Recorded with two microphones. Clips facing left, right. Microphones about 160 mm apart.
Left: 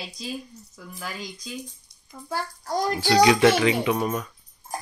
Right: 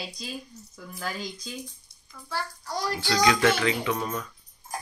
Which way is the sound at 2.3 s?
45° left (ahead or behind).